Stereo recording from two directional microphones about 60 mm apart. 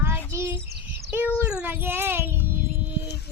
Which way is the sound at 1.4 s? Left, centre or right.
Centre.